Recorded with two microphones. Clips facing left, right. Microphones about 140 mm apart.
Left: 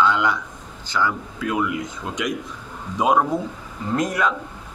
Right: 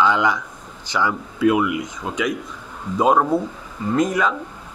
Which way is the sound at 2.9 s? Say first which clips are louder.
Right 2 dB; centre (ahead or behind).